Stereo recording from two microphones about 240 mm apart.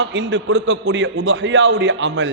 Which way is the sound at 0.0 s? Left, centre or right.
Right.